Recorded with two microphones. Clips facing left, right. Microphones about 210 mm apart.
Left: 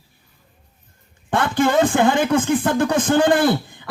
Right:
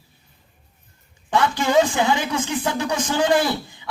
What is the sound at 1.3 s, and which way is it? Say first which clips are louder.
Speech: left 1 dB; 55° left (ahead or behind).